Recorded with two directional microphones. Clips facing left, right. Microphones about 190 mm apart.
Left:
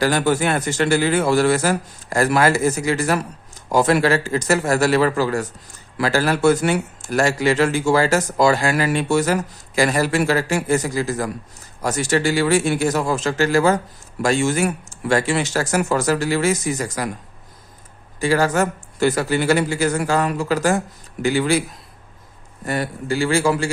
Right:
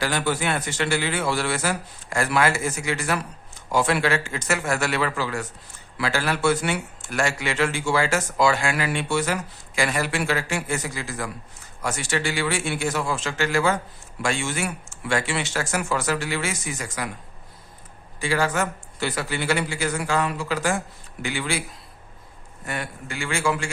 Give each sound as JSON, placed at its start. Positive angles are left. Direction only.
{"t": 0.0, "sound": "a man's voice", "side_deg": 45}
{"t": 18.2, "sound": "a man's voice", "side_deg": 40}
{"t": 22.6, "sound": "a man's voice", "side_deg": 35}